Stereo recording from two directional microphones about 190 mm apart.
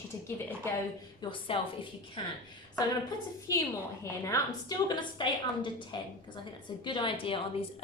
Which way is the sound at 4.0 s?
15° left (ahead or behind).